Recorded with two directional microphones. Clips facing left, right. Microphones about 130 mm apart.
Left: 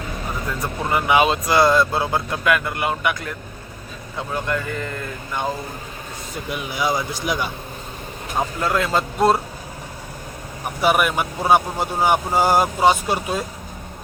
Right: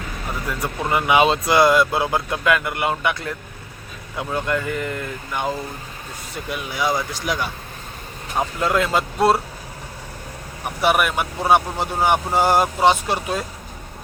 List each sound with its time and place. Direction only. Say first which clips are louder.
0.4 s speech: right 1 dB; 15° right (ahead or behind)
6.6 s speech: even; 15° left (ahead or behind)
8.4 s speech: right 1 dB; 20° right (ahead or behind)
9.1 s speech: even; 5° right (ahead or behind)
10.8 s speech: left 1 dB; centre (ahead or behind)